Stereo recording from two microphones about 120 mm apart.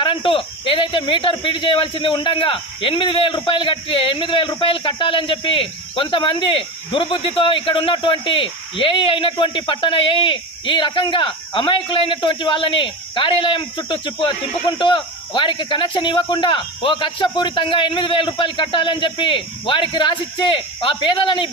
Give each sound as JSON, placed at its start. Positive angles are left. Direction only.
{"t": 0.0, "sound": "speech", "side_deg": 45}